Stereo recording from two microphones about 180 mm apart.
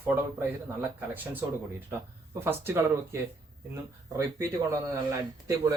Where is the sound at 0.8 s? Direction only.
10° right (ahead or behind).